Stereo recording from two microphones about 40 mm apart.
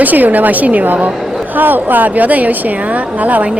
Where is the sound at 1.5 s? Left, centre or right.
Right.